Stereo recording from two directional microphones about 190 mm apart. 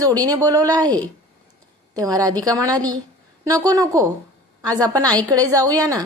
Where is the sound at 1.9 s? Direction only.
20° right (ahead or behind).